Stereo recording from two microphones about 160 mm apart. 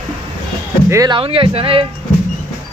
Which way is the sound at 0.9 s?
25° right (ahead or behind).